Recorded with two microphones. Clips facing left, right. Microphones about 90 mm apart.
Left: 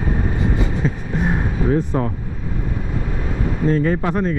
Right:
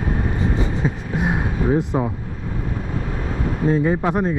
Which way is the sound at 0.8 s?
10° right (ahead or behind).